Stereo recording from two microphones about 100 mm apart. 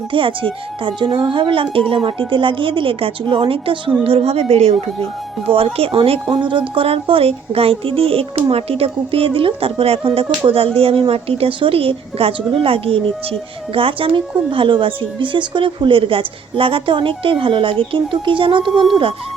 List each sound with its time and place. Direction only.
0.1 s a woman's voice: 60° right (ahead or behind)
4.0 s a woman's voice: 80° right
5.5 s a child's voice: 75° right (ahead or behind)
6.3 s speech: 50° right (ahead or behind)
6.7 s a child's voice: 75° right (ahead or behind); by 18.7 s 55° right (ahead or behind)
18.7 s speech: 5° right (ahead or behind)